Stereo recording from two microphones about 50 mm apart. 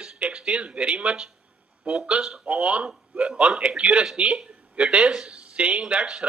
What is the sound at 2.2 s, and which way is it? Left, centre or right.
Speech, centre.